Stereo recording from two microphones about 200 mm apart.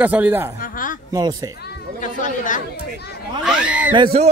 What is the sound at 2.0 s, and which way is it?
Speech, 40° left (ahead or behind).